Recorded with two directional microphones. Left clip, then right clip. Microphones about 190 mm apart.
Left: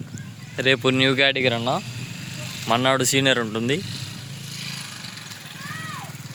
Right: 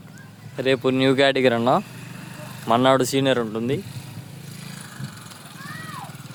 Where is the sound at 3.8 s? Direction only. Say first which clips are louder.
Left 7 dB; 55° right (ahead or behind).